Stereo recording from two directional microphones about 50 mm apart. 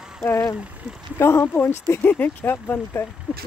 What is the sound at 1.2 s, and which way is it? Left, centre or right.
Speech, left.